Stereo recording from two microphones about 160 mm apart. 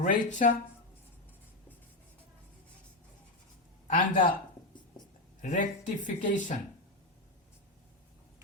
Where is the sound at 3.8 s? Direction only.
55° left (ahead or behind).